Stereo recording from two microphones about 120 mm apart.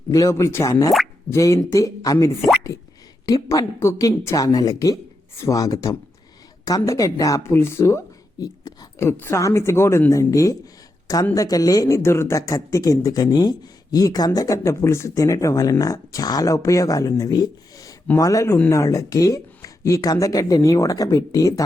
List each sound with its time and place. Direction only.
0.1 s speech: 25° left (ahead or behind)